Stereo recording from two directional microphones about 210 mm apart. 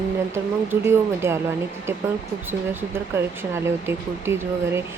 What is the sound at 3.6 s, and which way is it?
Speech, 10° right (ahead or behind).